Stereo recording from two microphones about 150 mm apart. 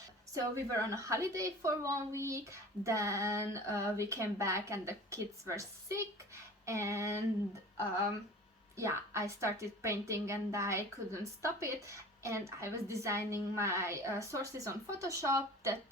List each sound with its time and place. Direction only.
0.3 s a woman's voice: 20° right (ahead or behind)
8.7 s a woman's voice: 20° right (ahead or behind)